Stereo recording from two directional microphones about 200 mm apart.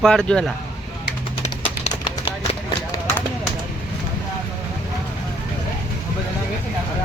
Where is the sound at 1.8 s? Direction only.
30° left (ahead or behind).